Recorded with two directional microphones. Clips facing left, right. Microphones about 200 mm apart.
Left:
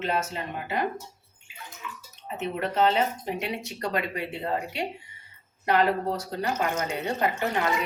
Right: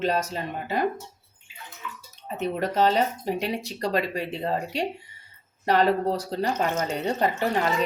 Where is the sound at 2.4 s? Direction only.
40° right (ahead or behind).